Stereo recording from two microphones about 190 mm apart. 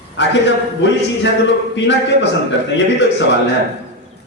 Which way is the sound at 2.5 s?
70° left (ahead or behind).